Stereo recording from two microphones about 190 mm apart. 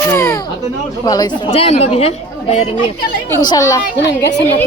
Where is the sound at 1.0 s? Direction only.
20° left (ahead or behind).